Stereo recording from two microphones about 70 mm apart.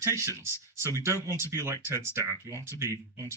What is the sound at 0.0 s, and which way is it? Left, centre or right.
Speech, right.